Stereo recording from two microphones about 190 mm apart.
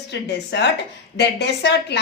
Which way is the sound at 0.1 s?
65° left (ahead or behind).